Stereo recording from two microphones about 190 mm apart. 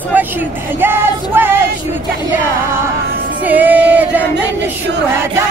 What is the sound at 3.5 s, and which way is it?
Music, 10° right (ahead or behind).